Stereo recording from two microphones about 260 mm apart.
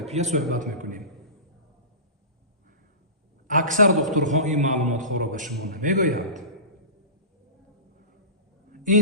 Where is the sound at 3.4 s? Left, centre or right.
Right.